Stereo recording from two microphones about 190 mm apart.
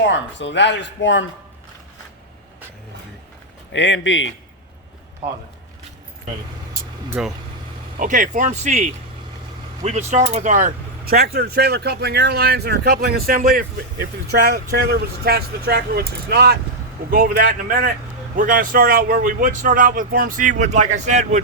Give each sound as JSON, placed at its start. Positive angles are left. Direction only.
{"t": 0.1, "sound": "speech", "side_deg": 70}
{"t": 3.7, "sound": "speech", "side_deg": 70}
{"t": 7.1, "sound": "speech", "side_deg": -5}
{"t": 7.9, "sound": "speech", "side_deg": -45}